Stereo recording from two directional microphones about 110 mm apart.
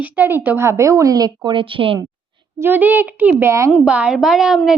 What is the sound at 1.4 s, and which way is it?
Speech, 50° right (ahead or behind).